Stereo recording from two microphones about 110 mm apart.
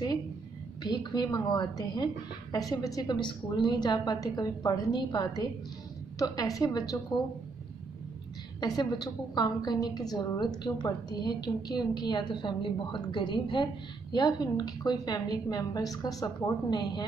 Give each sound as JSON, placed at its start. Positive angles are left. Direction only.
{"t": 0.8, "sound": "a woman's voice", "side_deg": 40}
{"t": 8.5, "sound": "a woman's voice", "side_deg": 35}